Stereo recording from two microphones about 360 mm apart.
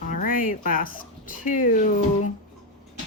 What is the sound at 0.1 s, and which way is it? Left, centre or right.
Speech, left.